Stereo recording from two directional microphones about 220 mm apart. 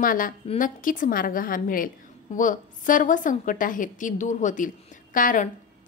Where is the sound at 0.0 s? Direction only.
40° left (ahead or behind).